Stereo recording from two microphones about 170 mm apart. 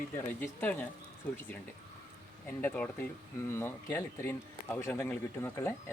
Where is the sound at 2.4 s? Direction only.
10° left (ahead or behind).